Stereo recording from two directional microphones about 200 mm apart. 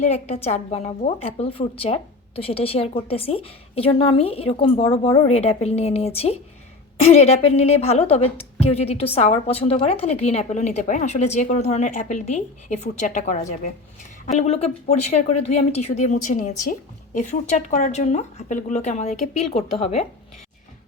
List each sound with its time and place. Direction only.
0.0 s a woman's voice: 35° left (ahead or behind)